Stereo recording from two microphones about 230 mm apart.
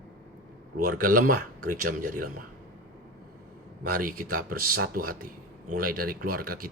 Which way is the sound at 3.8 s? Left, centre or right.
Right.